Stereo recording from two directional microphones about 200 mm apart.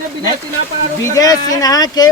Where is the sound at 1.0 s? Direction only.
20° left (ahead or behind).